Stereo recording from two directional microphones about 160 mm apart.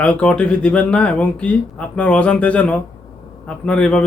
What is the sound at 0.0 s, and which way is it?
A man's voice, 5° left (ahead or behind).